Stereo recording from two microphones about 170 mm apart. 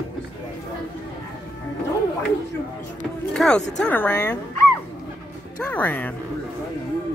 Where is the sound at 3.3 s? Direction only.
5° left (ahead or behind).